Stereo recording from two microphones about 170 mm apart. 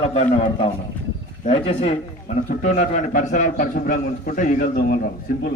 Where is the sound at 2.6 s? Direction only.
45° left (ahead or behind).